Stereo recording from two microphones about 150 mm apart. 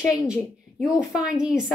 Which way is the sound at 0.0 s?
20° left (ahead or behind).